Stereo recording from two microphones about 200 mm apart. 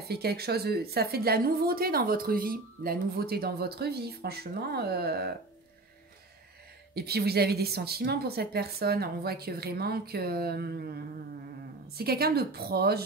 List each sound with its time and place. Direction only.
0.0 s a woman's voice: 50° right (ahead or behind)
6.9 s a woman's voice: 50° right (ahead or behind)
12.0 s a woman's voice: 50° right (ahead or behind)